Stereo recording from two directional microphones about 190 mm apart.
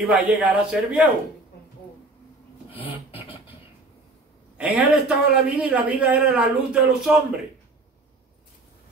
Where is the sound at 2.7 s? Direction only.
30° left (ahead or behind).